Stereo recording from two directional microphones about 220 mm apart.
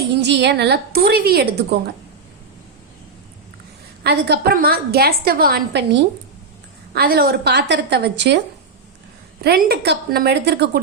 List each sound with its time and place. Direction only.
0.2 s a woman's voice: 50° right (ahead or behind)
4.0 s a woman's voice: 45° right (ahead or behind)
9.4 s a woman's voice: 45° right (ahead or behind)